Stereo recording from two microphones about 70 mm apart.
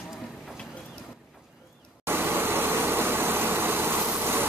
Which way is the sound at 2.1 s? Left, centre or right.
Right.